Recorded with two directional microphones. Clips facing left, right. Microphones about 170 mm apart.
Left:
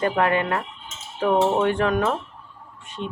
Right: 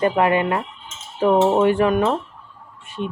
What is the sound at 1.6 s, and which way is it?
Speech, 10° right (ahead or behind).